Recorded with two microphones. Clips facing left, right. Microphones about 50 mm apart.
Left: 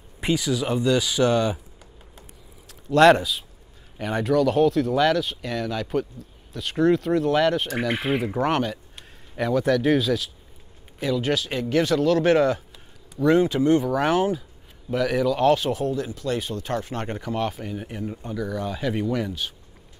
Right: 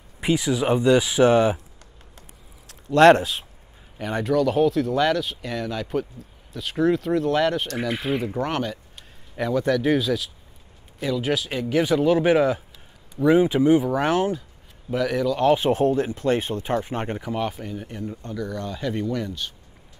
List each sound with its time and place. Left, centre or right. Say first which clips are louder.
0.3 s speech: right 3 dB; right
3.0 s speech: right 1 dB; right
4.0 s speech: left 1 dB; centre
15.7 s speech: right 5 dB; right
16.6 s speech: right 3 dB; right; by 17.7 s centre
17.7 s speech: left 1 dB; centre